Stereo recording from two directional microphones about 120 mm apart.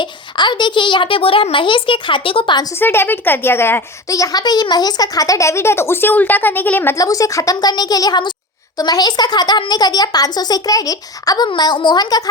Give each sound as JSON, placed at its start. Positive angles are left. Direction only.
{"t": 0.0, "sound": "a child's voice", "side_deg": 40}
{"t": 2.7, "sound": "speech", "side_deg": 20}
{"t": 6.9, "sound": "a woman's voice", "side_deg": 30}